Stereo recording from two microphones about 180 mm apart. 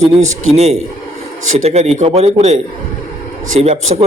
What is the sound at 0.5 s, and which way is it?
A man's voice, 35° right (ahead or behind).